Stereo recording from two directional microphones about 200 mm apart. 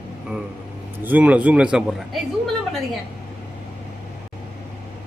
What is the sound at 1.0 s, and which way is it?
A woman's voice, 5° right (ahead or behind).